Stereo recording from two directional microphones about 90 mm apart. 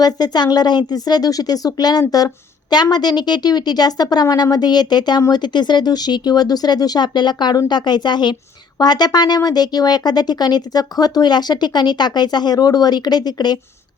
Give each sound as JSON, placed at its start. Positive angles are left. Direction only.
{"t": 0.0, "sound": "speech", "side_deg": 50}